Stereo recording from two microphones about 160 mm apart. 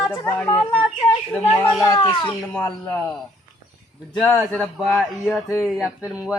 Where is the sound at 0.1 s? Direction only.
20° left (ahead or behind).